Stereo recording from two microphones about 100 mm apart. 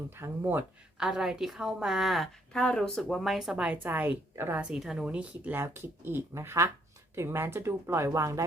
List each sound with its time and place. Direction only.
0.2 s speech: 20° right (ahead or behind)
0.9 s a woman's voice: 5° right (ahead or behind)
4.6 s speech: 5° right (ahead or behind); by 8.4 s 30° right (ahead or behind)